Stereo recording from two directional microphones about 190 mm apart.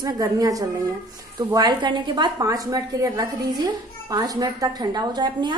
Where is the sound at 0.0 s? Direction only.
20° right (ahead or behind).